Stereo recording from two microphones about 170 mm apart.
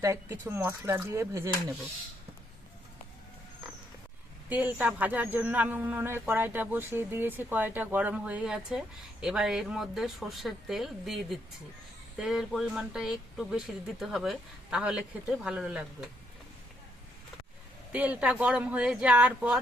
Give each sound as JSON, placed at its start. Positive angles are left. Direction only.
{"t": 0.0, "sound": "speech", "side_deg": -15}
{"t": 4.4, "sound": "speech", "side_deg": -10}
{"t": 17.9, "sound": "speech", "side_deg": -10}